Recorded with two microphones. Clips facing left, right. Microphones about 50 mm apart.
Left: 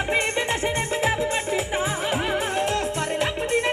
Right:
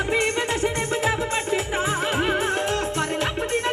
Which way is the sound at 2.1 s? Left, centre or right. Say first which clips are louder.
Right 2 dB; right.